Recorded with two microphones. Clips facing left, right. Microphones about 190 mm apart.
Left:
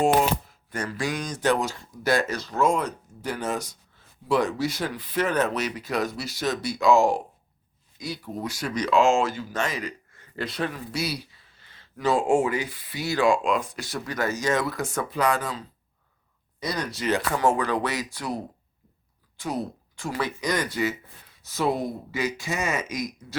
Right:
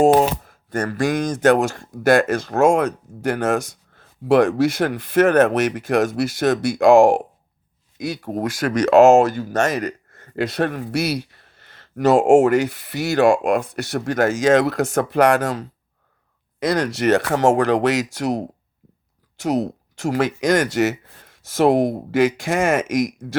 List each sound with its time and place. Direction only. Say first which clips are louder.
0.0 s speech: right 7 dB; 45° right (ahead or behind)
2.6 s speech: right 7 dB; 75° right (ahead or behind)
3.2 s speech: right 9 dB; 50° right (ahead or behind)
3.6 s a sound: right 6 dB; 50° right (ahead or behind)
4.6 s speech: right 9 dB; 50° right (ahead or behind); by 15.6 s 75° right (ahead or behind)
16.6 s speech: right 10 dB; 90° right
18.1 s speech: right 9 dB; 80° right
21.3 s speech: right 10 dB; 90° right